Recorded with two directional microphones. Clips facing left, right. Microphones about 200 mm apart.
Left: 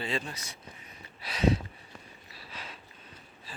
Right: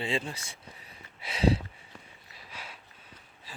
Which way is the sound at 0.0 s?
25° right (ahead or behind).